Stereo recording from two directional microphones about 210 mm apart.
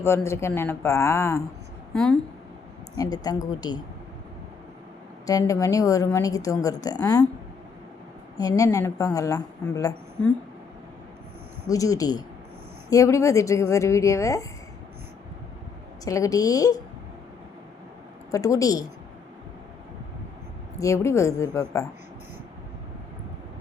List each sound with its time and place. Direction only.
0.0 s a woman's voice: 10° left (ahead or behind)
3.0 s a woman's voice: 20° left (ahead or behind)
5.2 s a woman's voice: 15° left (ahead or behind)
8.4 s a woman's voice: 15° left (ahead or behind)
11.7 s a woman's voice: 15° left (ahead or behind)
16.0 s a woman's voice: 15° left (ahead or behind)
18.3 s a woman's voice: 15° left (ahead or behind)
20.7 s a woman's voice: 15° left (ahead or behind)